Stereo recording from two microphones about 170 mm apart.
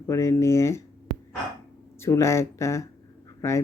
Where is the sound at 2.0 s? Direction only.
15° left (ahead or behind).